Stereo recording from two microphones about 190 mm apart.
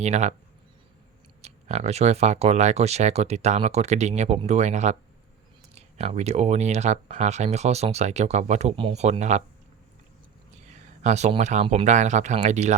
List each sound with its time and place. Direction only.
0.0 s speech: 35° right (ahead or behind)
1.4 s speech: 35° right (ahead or behind)
11.0 s speech: 35° right (ahead or behind)